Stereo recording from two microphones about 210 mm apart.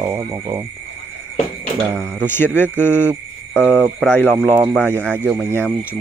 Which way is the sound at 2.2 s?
10° left (ahead or behind).